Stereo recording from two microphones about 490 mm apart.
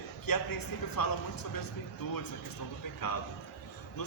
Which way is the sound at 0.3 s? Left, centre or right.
Left.